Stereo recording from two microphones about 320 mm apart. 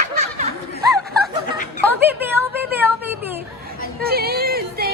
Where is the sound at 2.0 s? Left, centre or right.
Centre.